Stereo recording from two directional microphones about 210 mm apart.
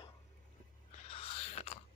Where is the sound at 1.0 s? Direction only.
25° left (ahead or behind).